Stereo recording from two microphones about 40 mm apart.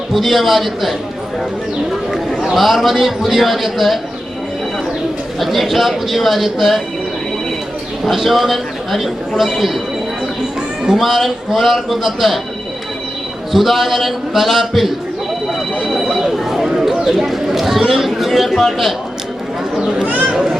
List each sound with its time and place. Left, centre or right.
0.1 s speech: centre
2.5 s speech: centre
5.4 s speech: centre
8.0 s speech: centre
10.8 s speech: centre
13.5 s speech: centre
15.8 s a sound: centre
17.1 s speech: centre
20.1 s speech: right
20.3 s a sound: centre